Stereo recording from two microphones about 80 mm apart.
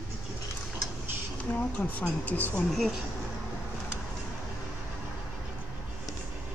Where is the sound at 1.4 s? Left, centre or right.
Left.